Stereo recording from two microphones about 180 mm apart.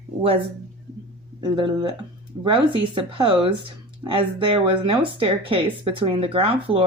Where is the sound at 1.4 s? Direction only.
25° right (ahead or behind).